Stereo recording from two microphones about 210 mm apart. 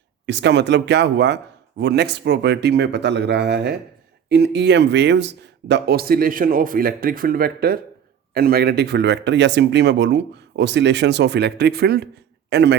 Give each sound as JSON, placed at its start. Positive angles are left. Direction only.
{"t": 0.3, "sound": "a man's voice", "side_deg": -55}